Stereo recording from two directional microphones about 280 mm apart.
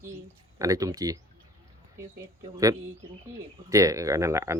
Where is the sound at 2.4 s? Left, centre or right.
Centre.